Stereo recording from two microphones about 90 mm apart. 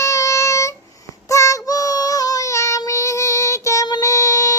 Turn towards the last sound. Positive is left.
turn(degrees=35)  # may be behind; listen again after turning